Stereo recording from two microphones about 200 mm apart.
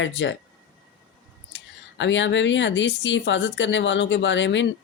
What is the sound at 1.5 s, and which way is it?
Speech, 65° left (ahead or behind).